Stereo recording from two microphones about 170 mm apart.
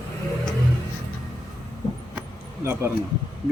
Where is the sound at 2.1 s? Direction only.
15° right (ahead or behind).